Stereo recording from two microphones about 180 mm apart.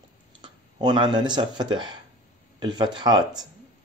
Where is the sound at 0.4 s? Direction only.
25° right (ahead or behind).